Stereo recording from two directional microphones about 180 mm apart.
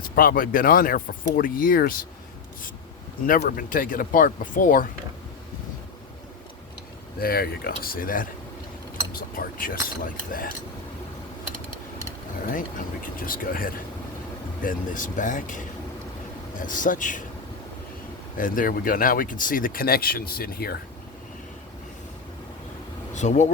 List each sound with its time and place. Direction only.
0.0 s speech: 50° left (ahead or behind)
3.2 s speech: 50° left (ahead or behind)
7.2 s speech: 60° left (ahead or behind)
9.3 s speech: 50° left (ahead or behind)
12.5 s speech: 50° left (ahead or behind)
18.3 s speech: 50° left (ahead or behind)
23.1 s speech: 40° left (ahead or behind)